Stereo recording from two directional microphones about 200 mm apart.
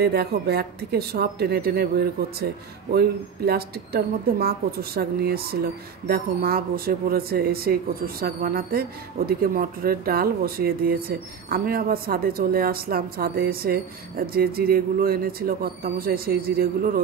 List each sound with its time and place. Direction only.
0.0 s speech: 55° right (ahead or behind)